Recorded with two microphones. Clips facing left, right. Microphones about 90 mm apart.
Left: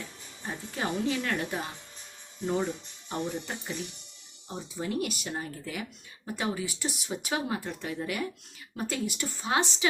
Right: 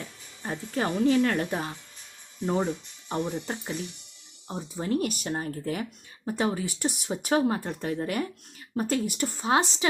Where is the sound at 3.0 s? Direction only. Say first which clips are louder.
Right 3 dB; 40° right (ahead or behind).